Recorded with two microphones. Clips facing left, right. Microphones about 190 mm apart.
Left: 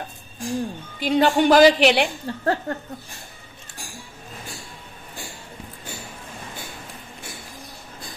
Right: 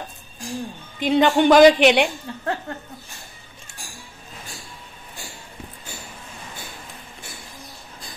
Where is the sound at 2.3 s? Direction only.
35° left (ahead or behind).